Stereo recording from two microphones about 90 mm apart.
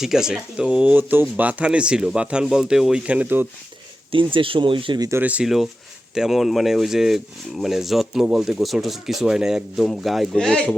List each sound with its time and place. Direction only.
0.0 s speech: 5° right (ahead or behind)
4.1 s speech: 70° right (ahead or behind)
5.2 s speech: 15° right (ahead or behind)
6.1 s speech: 5° right (ahead or behind)